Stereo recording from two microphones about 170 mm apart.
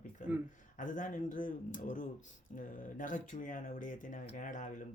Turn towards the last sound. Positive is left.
turn(degrees=50)  # may be behind; listen again after turning